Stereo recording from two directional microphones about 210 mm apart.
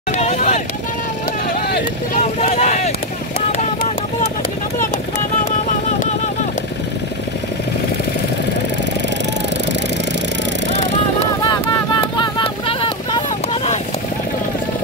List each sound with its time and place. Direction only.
0.1 s vehicle: 35° left (ahead or behind)
2.4 s vehicle: 30° left (ahead or behind)
12.2 s vehicle: 25° left (ahead or behind)